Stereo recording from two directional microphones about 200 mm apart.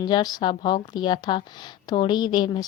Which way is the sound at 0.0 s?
20° left (ahead or behind).